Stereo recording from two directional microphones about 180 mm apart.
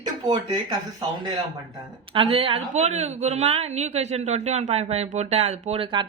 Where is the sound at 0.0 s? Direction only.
20° right (ahead or behind).